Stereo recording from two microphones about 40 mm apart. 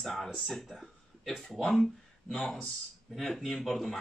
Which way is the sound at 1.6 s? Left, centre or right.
Centre.